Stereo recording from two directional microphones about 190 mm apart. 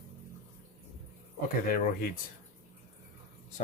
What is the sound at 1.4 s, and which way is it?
Speech, 50° left (ahead or behind).